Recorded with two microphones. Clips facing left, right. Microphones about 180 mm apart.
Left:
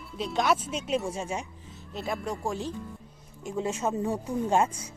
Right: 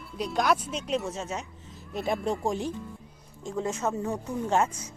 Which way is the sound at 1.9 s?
15° right (ahead or behind).